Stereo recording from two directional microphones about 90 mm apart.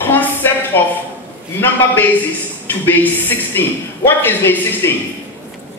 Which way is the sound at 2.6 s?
20° left (ahead or behind).